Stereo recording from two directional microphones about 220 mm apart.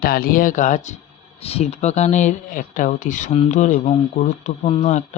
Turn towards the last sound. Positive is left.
turn(degrees=30)  # may be behind; listen again after turning